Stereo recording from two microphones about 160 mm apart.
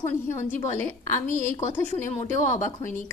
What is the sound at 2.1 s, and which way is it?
Speech, 50° left (ahead or behind).